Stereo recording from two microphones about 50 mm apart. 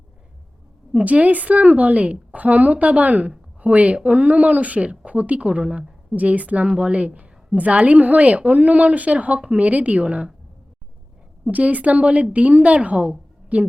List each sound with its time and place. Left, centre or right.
0.9 s speech: right
11.5 s speech: right